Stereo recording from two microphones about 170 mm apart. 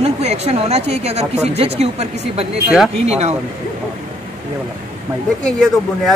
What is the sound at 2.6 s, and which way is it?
Speech, 5° right (ahead or behind).